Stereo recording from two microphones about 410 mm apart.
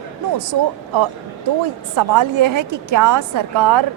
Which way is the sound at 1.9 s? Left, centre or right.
Right.